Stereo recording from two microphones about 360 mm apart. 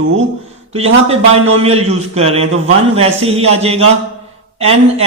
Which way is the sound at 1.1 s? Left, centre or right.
Centre.